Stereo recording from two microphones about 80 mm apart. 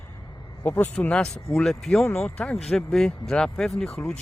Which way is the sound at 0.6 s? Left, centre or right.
Left.